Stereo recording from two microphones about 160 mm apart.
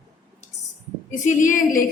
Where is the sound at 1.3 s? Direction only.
50° left (ahead or behind).